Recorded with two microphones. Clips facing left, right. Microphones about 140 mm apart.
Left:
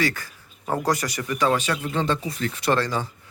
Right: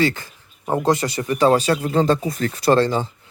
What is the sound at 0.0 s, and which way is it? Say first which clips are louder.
Speech: right 5 dB; 25° right (ahead or behind).